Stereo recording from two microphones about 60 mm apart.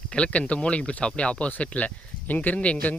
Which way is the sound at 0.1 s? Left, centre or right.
Centre.